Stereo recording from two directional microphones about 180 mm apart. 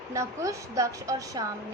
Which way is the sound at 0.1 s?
15° right (ahead or behind).